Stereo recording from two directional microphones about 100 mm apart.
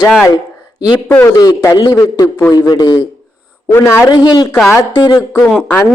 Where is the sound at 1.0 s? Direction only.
20° left (ahead or behind).